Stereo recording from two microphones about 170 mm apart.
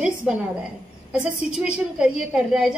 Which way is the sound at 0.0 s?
5° right (ahead or behind).